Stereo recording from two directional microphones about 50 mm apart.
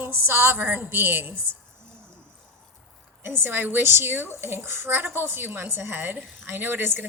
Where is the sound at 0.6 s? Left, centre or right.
Right.